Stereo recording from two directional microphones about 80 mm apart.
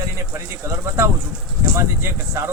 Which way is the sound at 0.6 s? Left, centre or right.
Right.